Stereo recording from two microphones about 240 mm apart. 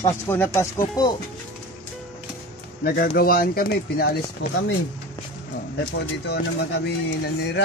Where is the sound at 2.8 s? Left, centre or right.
Left.